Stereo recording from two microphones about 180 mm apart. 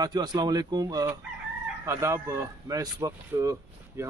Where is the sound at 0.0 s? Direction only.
20° right (ahead or behind).